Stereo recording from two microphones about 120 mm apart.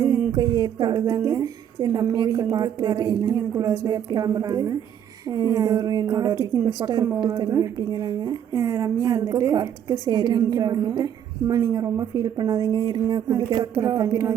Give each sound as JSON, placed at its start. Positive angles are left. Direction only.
{"t": 0.0, "sound": "a woman's voice", "side_deg": -30}